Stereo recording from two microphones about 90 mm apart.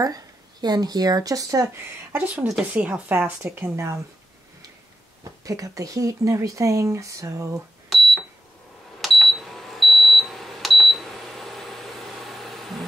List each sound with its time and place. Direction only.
0.0 s speech: 45° right (ahead or behind)
2.1 s a woman's voice: 15° right (ahead or behind)
3.5 s speech: 30° right (ahead or behind)
5.4 s speech: 40° right (ahead or behind)
9.0 s a sound: centre (ahead or behind)